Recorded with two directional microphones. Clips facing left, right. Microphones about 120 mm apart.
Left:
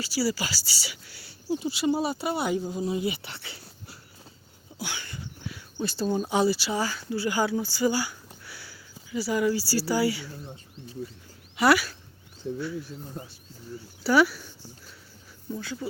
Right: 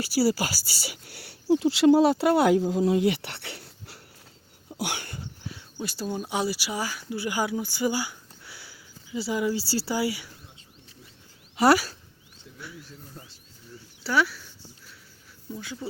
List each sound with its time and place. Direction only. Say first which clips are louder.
0.0 s speech: right 4 dB; 55° right (ahead or behind); by 4.0 s 70° right (ahead or behind)
4.8 s a sound: right 4 dB; 60° right (ahead or behind)
5.7 s speech: left 4 dB; 10° right (ahead or behind)
11.5 s speech: right 2 dB; 35° right (ahead or behind)
12.4 s speech: left 19 dB; 35° left (ahead or behind)
13.2 s speech: left 7 dB; 15° left (ahead or behind)
14.0 s speech: left 4 dB; 5° left (ahead or behind)
15.8 s speech: left 1 dB; 25° right (ahead or behind)